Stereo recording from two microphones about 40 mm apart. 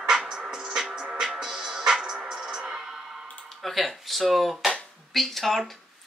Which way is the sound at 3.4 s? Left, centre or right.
Centre.